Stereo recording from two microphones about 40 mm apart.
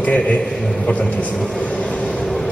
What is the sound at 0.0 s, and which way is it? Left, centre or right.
Speech, left.